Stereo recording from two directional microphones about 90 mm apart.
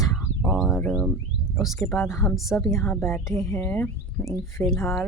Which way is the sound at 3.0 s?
30° left (ahead or behind).